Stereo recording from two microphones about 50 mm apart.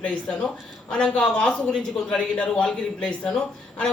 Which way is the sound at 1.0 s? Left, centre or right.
Centre.